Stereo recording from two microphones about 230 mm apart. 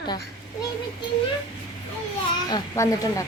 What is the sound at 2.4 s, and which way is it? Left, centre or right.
Speech, centre.